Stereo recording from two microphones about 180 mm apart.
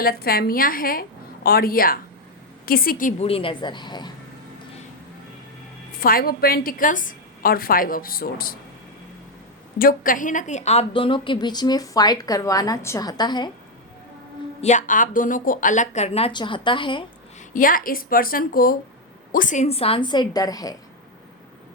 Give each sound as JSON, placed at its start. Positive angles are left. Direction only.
{"t": 0.0, "sound": "a woman's voice", "side_deg": 55}
{"t": 3.2, "sound": "a woman's voice", "side_deg": 30}
{"t": 6.0, "sound": "a woman's voice", "side_deg": 55}
{"t": 9.7, "sound": "a woman's voice", "side_deg": 50}
{"t": 14.6, "sound": "a woman's voice", "side_deg": 40}
{"t": 17.5, "sound": "a woman's voice", "side_deg": 50}